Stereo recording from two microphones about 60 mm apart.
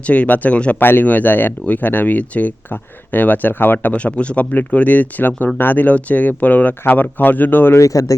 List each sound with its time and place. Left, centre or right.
0.0 s speech: left
0.8 s speech: left
3.9 s speech: left
7.8 s speech: left